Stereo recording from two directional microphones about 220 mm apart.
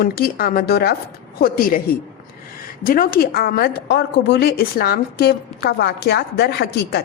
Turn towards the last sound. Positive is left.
turn(degrees=50)  # may be behind; listen again after turning